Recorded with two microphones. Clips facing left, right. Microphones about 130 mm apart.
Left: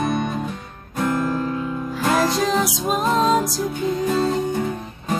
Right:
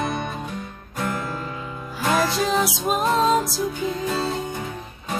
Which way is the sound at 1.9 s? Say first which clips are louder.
Left 2 dB; centre (ahead or behind).